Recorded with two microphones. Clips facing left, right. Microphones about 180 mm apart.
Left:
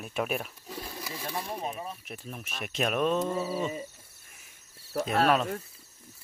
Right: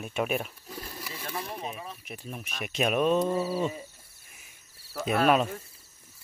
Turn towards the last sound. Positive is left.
turn(degrees=-15)  # may be behind; listen again after turning